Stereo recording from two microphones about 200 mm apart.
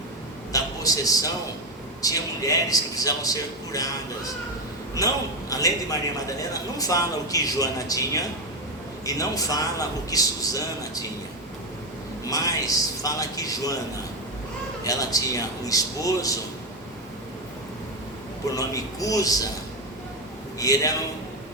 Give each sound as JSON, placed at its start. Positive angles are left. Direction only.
{"t": 0.5, "sound": "a sound", "side_deg": 15}
{"t": 2.0, "sound": "a man's voice", "side_deg": 15}
{"t": 5.5, "sound": "a man's voice", "side_deg": 15}
{"t": 12.3, "sound": "a man's voice", "side_deg": 15}
{"t": 14.8, "sound": "a man's voice", "side_deg": 15}
{"t": 18.5, "sound": "a man's voice", "side_deg": 15}
{"t": 20.6, "sound": "a man's voice", "side_deg": 15}